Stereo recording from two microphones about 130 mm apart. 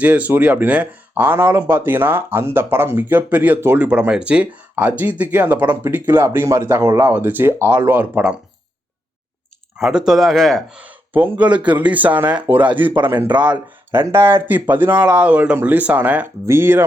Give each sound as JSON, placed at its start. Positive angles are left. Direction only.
{"t": 0.0, "sound": "speech", "side_deg": -10}
{"t": 9.7, "sound": "speech", "side_deg": -5}
{"t": 10.8, "sound": "speech", "side_deg": -15}